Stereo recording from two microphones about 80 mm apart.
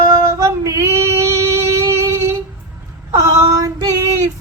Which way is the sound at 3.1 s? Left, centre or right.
Right.